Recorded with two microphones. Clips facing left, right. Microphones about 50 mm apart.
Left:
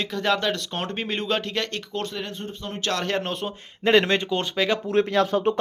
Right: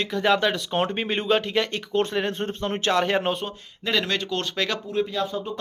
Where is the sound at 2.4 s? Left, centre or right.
Right.